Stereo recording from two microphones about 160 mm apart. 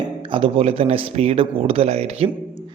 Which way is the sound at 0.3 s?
35° right (ahead or behind).